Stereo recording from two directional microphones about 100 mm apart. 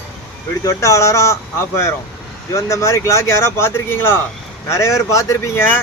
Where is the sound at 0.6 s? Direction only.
30° left (ahead or behind).